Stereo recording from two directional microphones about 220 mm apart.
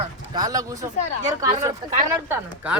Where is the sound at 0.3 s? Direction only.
15° right (ahead or behind).